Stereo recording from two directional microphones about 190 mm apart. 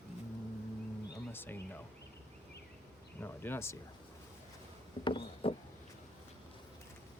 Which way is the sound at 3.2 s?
10° left (ahead or behind).